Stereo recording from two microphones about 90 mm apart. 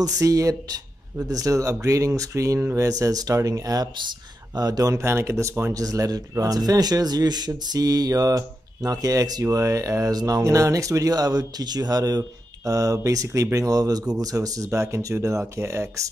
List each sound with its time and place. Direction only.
0.0 s speech: 40° right (ahead or behind)
2.9 s speech: 40° right (ahead or behind)